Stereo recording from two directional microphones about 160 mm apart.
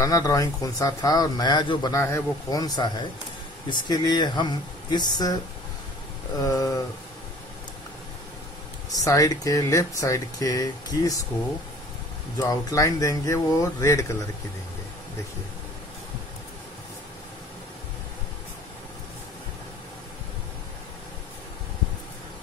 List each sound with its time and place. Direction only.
0.0 s speech: 20° left (ahead or behind)
6.4 s speech: 20° left (ahead or behind)
8.9 s speech: 20° left (ahead or behind)
12.4 s speech: 20° left (ahead or behind)